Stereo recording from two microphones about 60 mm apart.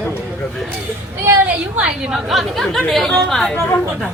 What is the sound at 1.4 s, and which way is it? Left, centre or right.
Speech, right.